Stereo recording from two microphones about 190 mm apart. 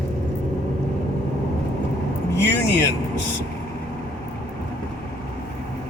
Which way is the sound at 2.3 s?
65° left (ahead or behind).